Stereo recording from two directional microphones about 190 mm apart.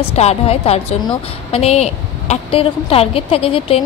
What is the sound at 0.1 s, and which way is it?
A woman's voice, 35° left (ahead or behind).